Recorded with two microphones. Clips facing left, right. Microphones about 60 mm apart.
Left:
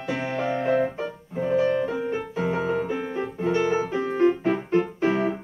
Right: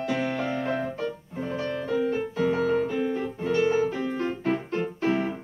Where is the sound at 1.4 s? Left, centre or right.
Centre.